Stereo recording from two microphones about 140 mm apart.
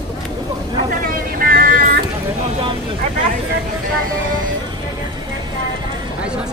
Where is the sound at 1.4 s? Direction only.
90° right.